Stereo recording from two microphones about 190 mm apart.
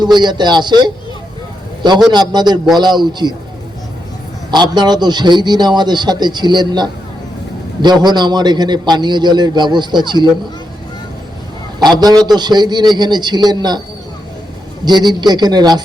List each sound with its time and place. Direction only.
0.0 s a man's voice: 20° right (ahead or behind)
2.1 s a man's voice: 20° right (ahead or behind)
4.5 s a man's voice: 20° right (ahead or behind)
11.8 s a man's voice: 20° right (ahead or behind)
14.8 s a man's voice: 20° right (ahead or behind)